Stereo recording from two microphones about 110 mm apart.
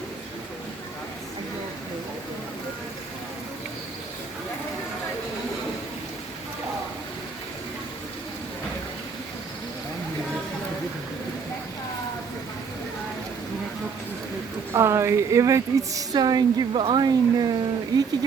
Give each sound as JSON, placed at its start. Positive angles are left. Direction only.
{"t": 14.7, "sound": "a woman's voice", "side_deg": -25}